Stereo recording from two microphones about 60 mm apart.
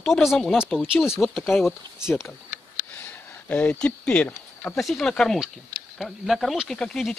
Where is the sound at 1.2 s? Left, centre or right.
Centre.